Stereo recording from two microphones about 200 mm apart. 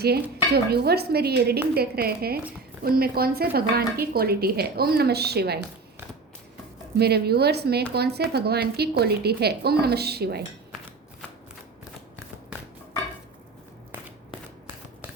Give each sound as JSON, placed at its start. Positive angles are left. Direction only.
{"t": 0.0, "sound": "speech", "side_deg": -50}
{"t": 7.0, "sound": "speech", "side_deg": -55}